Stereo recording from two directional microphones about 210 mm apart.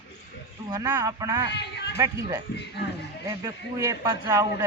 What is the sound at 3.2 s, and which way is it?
Speech, 15° right (ahead or behind).